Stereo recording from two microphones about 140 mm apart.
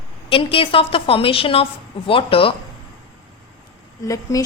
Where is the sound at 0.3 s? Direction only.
40° left (ahead or behind).